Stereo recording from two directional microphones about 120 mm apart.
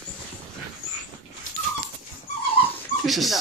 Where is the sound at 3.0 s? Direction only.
Centre (ahead or behind).